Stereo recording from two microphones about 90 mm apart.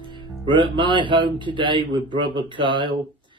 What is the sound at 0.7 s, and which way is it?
A man's voice, 65° right (ahead or behind).